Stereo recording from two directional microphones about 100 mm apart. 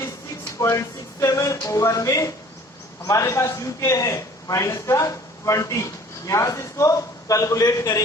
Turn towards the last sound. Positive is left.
turn(degrees=35)  # may be behind; listen again after turning